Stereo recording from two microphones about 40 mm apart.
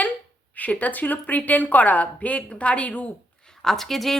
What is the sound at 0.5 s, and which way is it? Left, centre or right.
A woman's voice, left.